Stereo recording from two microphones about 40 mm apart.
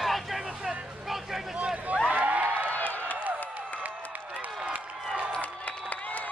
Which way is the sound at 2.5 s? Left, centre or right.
Right.